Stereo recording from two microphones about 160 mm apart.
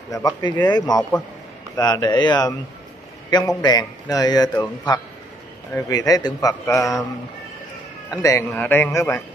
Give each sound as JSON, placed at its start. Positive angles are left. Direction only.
{"t": 0.1, "sound": "a man's voice", "side_deg": 25}
{"t": 8.1, "sound": "a man's voice", "side_deg": 20}